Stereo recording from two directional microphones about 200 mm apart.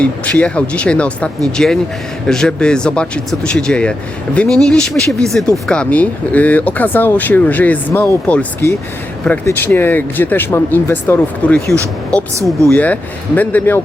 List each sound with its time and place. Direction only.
0.0 s speech: 5° left (ahead or behind)
12.6 s speech: 5° left (ahead or behind)